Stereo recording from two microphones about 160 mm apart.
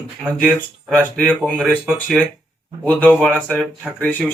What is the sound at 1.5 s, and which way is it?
Speech, 10° right (ahead or behind).